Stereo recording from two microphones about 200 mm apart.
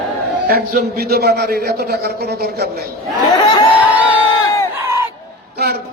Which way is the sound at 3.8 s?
5° right (ahead or behind).